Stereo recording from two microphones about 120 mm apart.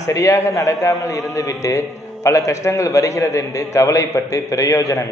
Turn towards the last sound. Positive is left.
turn(degrees=25)  # may be behind; listen again after turning